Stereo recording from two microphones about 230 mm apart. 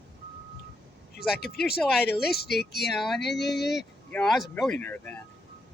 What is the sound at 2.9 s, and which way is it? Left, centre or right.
Speech, centre.